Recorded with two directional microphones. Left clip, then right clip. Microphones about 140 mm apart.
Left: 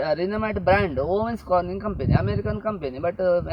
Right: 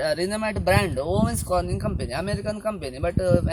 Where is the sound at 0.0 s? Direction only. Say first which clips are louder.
Even; 15° right (ahead or behind).